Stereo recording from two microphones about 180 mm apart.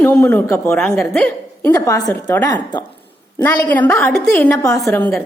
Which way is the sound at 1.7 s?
20° left (ahead or behind).